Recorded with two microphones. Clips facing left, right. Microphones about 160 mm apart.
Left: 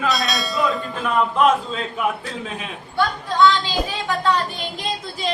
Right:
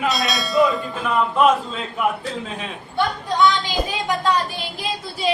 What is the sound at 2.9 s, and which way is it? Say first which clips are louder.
A woman's voice: left 1 dB; 15° right (ahead or behind).